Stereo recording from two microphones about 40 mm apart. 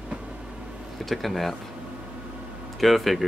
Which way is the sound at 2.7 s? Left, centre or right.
Centre.